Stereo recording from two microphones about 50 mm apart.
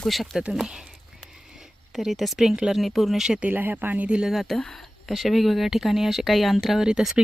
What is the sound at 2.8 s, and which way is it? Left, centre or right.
Speech, centre.